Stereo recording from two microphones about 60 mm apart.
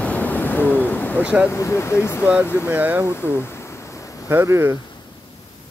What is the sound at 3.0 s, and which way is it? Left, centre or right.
Speech, left.